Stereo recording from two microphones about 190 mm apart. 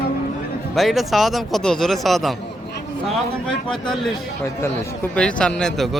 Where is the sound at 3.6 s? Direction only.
Centre (ahead or behind).